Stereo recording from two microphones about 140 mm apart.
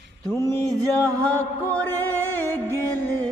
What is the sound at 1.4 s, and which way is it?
Music, 10° left (ahead or behind).